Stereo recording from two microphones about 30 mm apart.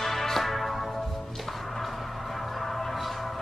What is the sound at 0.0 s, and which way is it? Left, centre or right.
Music, centre.